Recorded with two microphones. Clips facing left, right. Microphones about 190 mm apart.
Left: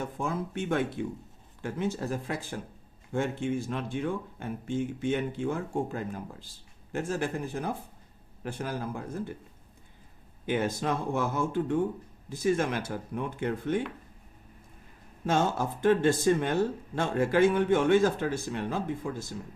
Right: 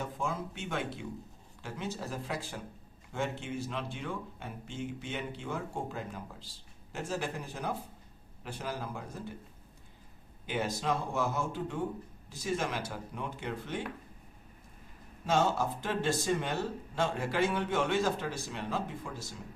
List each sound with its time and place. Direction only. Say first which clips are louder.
0.0 s speech: left 4 dB; 55° left (ahead or behind)
10.4 s speech: left 5 dB; 55° left (ahead or behind)
15.3 s speech: left 2 dB; 50° left (ahead or behind)